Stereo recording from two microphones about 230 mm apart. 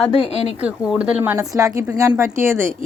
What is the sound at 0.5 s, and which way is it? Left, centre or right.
A woman's voice, centre.